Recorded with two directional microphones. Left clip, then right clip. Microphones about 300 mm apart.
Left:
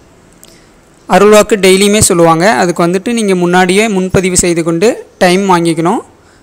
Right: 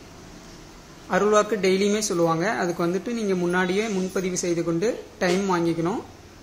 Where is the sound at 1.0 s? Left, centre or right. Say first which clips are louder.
Left 15 dB; left.